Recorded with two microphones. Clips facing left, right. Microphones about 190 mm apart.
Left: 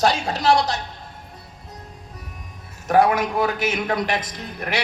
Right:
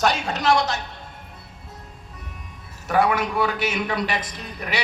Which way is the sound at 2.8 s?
45° left (ahead or behind).